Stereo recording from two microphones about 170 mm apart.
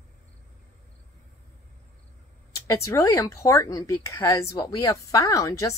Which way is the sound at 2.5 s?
20° left (ahead or behind).